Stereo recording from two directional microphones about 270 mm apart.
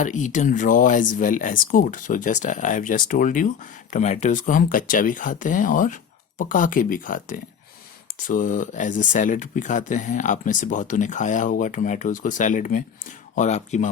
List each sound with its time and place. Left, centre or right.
0.0 s speech: left